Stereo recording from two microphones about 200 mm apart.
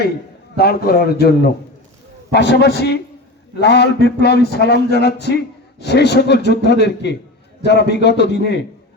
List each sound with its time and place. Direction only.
0.5 s a man's voice: 50° left (ahead or behind)
2.3 s a man's voice: 60° left (ahead or behind)